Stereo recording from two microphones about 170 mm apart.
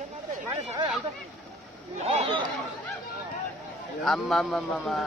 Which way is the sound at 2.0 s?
35° right (ahead or behind).